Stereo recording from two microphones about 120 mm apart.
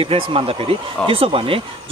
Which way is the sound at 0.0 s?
50° right (ahead or behind).